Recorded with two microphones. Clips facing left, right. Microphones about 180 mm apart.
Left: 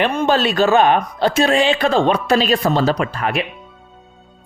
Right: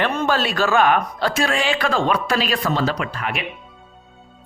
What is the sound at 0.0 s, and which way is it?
Speech, 15° left (ahead or behind).